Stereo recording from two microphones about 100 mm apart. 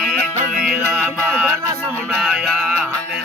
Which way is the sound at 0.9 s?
15° right (ahead or behind).